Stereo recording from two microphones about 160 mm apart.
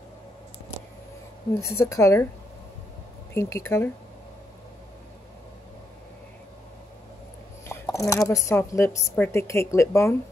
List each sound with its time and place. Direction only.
1.6 s a woman's voice: 20° left (ahead or behind)
3.3 s a woman's voice: 15° left (ahead or behind)
7.6 s a woman's voice: 15° left (ahead or behind)